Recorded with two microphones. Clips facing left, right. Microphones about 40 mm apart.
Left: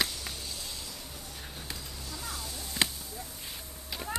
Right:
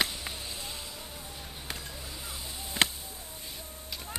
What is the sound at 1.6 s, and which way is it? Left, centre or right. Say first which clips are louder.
Basketball bounce: right 4 dB; right.